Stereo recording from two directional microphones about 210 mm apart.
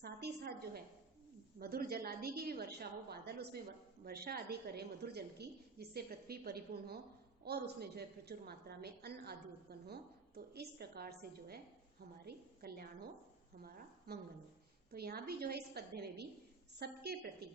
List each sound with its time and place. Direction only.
0.0 s a sound: 50° right (ahead or behind)
1.5 s a woman's voice: 45° right (ahead or behind)
12.6 s a woman's voice: 45° right (ahead or behind)